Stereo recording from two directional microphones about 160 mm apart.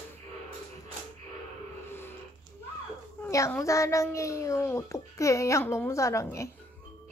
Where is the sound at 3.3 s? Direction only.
20° left (ahead or behind).